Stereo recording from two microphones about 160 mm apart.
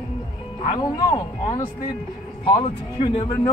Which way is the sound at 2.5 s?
35° left (ahead or behind).